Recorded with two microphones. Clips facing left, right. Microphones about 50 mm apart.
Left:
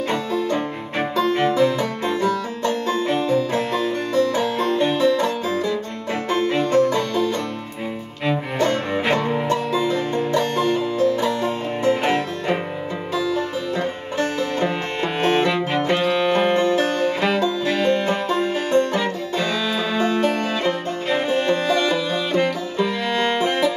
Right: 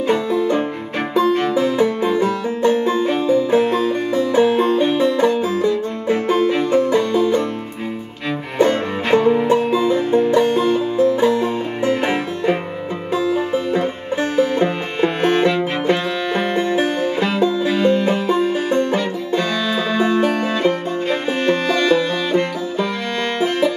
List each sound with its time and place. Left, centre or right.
0.3 s music: right
1.5 s music: centre
8.5 s music: centre
9.2 s music: centre
9.5 s music: right
13.1 s music: centre
15.2 s music: centre
16.5 s music: centre
18.7 s music: centre
20.0 s music: centre
21.6 s music: centre